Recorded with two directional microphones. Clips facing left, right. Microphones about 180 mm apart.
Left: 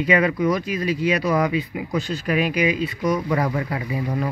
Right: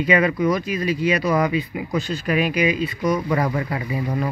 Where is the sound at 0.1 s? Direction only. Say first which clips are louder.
Right 1 dB; 20° right (ahead or behind).